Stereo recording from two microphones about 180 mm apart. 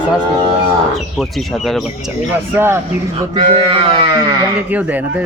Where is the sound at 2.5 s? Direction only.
15° right (ahead or behind).